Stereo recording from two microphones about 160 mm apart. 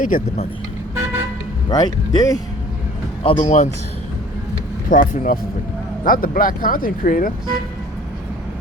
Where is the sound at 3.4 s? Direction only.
45° left (ahead or behind).